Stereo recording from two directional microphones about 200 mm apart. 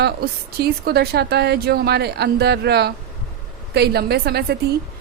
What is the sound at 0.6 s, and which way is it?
A woman's voice, 55° right (ahead or behind).